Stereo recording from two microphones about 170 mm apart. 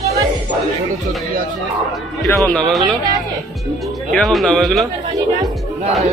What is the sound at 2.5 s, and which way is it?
Speech, centre (ahead or behind).